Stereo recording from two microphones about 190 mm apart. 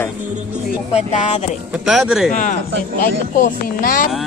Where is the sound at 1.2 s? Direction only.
35° left (ahead or behind).